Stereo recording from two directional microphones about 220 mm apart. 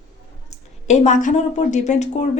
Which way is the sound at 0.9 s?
30° left (ahead or behind).